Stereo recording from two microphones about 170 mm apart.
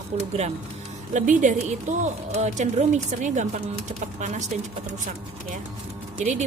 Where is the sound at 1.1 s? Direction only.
45° right (ahead or behind).